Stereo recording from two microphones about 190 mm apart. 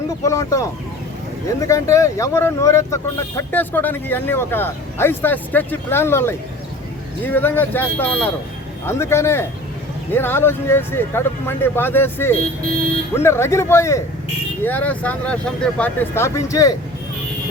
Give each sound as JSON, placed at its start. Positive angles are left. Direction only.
{"t": 0.3, "sound": "speech", "side_deg": 15}